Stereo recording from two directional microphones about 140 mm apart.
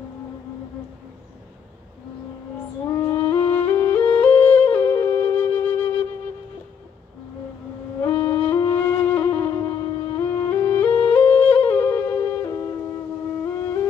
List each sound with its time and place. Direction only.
2.9 s music: 25° left (ahead or behind)
3.3 s music: 10° left (ahead or behind)
8.0 s music: 25° left (ahead or behind)
8.7 s flute: 15° left (ahead or behind)
9.5 s music: 30° left (ahead or behind)
10.2 s music: 15° left (ahead or behind)